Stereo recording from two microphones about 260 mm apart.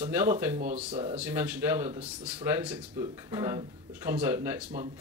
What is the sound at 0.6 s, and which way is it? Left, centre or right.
Speech, right.